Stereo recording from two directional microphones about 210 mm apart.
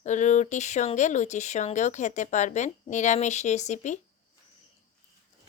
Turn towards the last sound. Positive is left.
turn(degrees=35)  # may be behind; listen again after turning